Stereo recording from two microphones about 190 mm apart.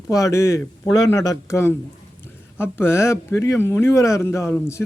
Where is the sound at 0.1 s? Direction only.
15° left (ahead or behind).